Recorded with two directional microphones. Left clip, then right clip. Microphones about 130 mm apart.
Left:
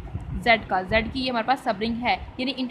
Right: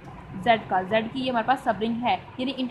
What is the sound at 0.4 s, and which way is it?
A woman's voice, 45° left (ahead or behind).